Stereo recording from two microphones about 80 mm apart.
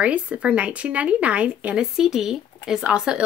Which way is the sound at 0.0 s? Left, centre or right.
Centre.